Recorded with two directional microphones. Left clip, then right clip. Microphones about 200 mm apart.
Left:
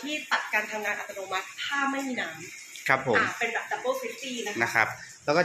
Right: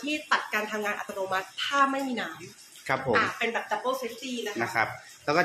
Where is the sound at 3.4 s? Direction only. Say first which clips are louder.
Even; 70° right (ahead or behind).